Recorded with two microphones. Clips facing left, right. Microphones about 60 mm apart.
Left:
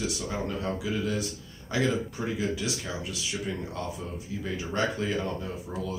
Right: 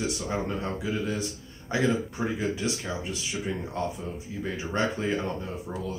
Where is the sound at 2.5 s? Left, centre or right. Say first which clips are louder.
Right 2 dB; right.